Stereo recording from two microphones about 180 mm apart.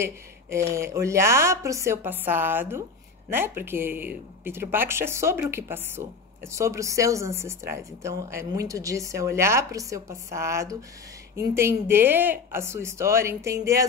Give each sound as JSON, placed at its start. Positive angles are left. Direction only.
{"t": 0.0, "sound": "a woman's voice", "side_deg": -15}